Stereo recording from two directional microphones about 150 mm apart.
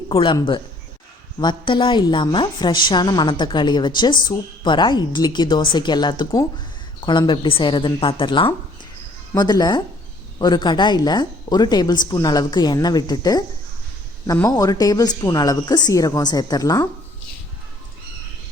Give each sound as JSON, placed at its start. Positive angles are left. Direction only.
{"t": 0.2, "sound": "a woman's voice", "side_deg": 35}
{"t": 14.4, "sound": "speech", "side_deg": 25}